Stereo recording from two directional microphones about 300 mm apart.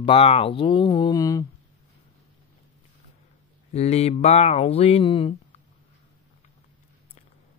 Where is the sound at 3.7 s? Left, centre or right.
Left.